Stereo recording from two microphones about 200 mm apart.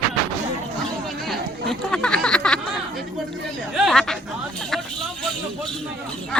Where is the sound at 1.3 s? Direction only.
Centre (ahead or behind).